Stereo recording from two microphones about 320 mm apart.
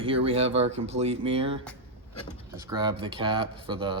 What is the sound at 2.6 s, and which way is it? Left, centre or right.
Speech, centre.